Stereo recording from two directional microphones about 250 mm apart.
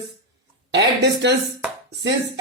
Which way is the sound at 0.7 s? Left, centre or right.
Right.